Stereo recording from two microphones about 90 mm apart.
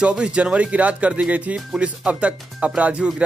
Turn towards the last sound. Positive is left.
turn(degrees=-10)  # may be behind; listen again after turning